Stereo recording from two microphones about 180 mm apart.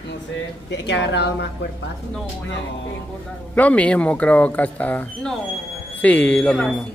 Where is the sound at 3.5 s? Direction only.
10° left (ahead or behind).